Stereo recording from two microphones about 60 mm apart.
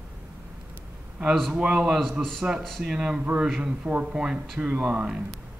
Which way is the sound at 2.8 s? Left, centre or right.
Centre.